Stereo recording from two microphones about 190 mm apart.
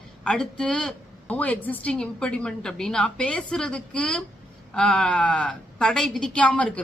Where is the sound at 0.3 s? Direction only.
5° left (ahead or behind).